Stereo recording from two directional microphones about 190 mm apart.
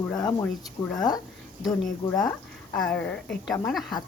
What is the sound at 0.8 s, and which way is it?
A woman's voice, 5° left (ahead or behind).